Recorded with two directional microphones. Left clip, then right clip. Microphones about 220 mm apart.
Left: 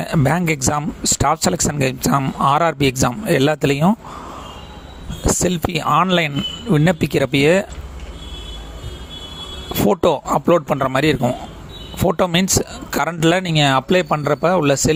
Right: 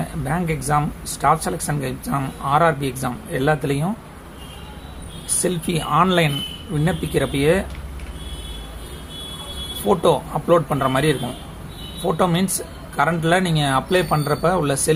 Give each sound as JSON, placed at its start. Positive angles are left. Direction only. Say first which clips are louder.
{"t": 0.0, "sound": "speech", "louder": "left 7 dB", "side_deg": 45}
{"t": 5.2, "sound": "speech", "louder": "left 5 dB", "side_deg": 45}
{"t": 9.9, "sound": "speech", "louder": "even", "side_deg": 40}